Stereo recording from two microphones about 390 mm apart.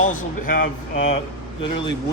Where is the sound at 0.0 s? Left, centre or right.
Centre.